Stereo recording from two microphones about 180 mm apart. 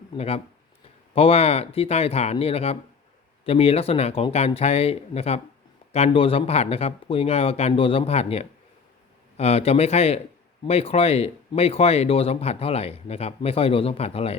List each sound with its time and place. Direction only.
0.2 s speech: 35° left (ahead or behind)